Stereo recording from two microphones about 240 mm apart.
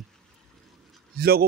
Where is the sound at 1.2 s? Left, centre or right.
Right.